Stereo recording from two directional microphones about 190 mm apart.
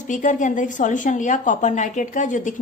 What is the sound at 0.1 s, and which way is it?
A woman's voice, 40° left (ahead or behind).